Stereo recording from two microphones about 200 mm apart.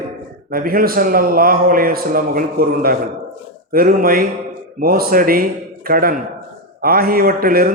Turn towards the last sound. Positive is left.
turn(degrees=-45)  # may be behind; listen again after turning